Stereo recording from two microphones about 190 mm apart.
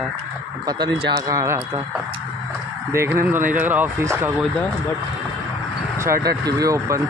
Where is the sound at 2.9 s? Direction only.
15° right (ahead or behind).